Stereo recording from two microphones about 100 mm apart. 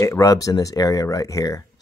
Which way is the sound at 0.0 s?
30° left (ahead or behind).